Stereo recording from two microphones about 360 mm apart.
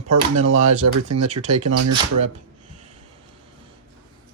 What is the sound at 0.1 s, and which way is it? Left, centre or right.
Speech, right.